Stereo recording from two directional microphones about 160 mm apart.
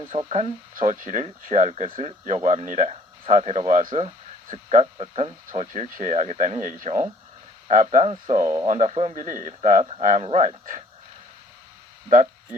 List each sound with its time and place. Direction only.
0.2 s speech: 40° right (ahead or behind)
0.8 s speech: 55° right (ahead or behind)